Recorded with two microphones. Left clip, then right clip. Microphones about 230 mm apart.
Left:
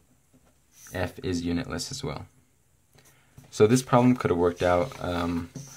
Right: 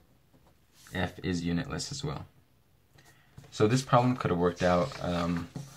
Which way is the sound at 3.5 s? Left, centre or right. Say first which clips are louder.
Left 5 dB; left.